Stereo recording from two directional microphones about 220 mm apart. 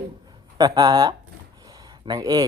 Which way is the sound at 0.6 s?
20° right (ahead or behind).